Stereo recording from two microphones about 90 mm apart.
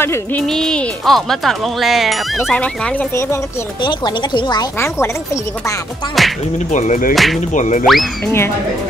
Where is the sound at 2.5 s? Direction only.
15° left (ahead or behind).